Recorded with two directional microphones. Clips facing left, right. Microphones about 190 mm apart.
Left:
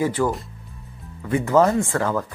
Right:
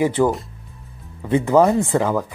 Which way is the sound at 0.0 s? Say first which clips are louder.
Right 4 dB; 20° right (ahead or behind).